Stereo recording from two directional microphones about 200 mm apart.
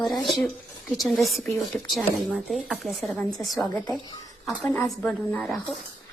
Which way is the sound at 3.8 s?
20° left (ahead or behind).